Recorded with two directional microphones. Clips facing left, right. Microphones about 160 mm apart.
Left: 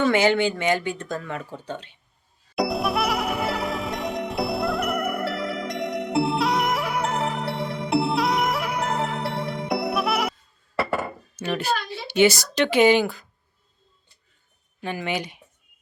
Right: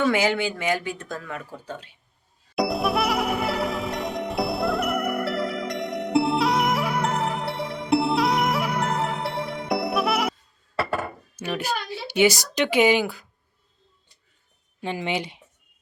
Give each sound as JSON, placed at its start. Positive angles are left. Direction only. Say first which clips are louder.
{"t": 0.0, "sound": "speech", "louder": "left 2 dB", "side_deg": -5}
{"t": 2.6, "sound": "music", "louder": "right 1 dB", "side_deg": 0}
{"t": 11.3, "sound": "speech", "louder": "left 2 dB", "side_deg": -15}
{"t": 14.8, "sound": "speech", "louder": "right 1 dB", "side_deg": -20}